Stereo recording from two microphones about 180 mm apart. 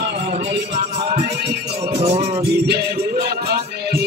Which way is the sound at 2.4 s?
65° right (ahead or behind).